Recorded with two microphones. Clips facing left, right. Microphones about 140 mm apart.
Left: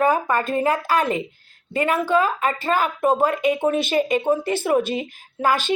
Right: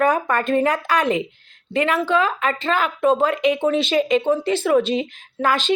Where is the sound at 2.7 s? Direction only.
25° left (ahead or behind).